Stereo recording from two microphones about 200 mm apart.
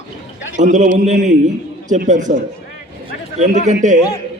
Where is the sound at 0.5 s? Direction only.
35° right (ahead or behind).